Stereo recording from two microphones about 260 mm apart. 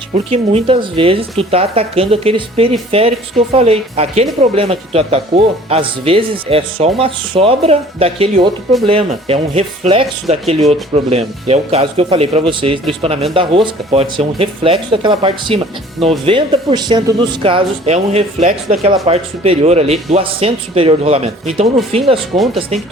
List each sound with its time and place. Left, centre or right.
0.3 s speech: right